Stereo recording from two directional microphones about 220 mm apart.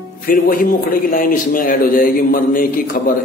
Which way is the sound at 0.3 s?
40° left (ahead or behind).